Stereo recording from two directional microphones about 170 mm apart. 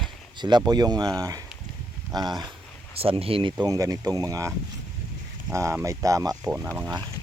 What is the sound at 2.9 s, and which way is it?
Speech, 35° right (ahead or behind).